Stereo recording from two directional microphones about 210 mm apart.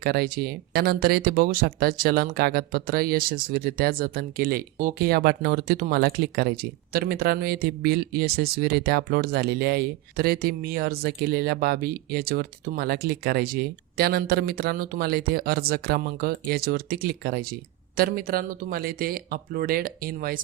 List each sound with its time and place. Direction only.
0.0 s speech: 45° right (ahead or behind)